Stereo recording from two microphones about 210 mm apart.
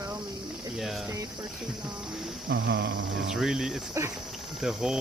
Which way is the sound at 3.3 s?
Centre (ahead or behind).